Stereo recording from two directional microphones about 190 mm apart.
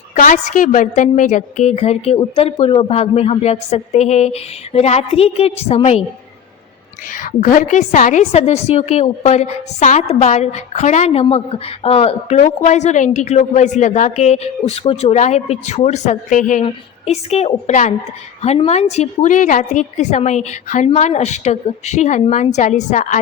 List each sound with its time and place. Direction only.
0.1 s a woman's voice: 40° left (ahead or behind)
7.1 s a woman's voice: 45° left (ahead or behind)